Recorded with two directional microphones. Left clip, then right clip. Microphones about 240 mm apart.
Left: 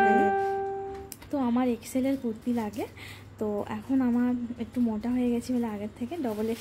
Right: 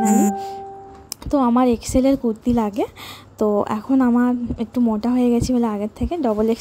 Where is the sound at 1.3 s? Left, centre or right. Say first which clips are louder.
Right 11 dB; right.